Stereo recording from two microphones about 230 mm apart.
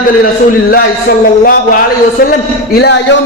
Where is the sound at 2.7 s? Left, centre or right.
Left.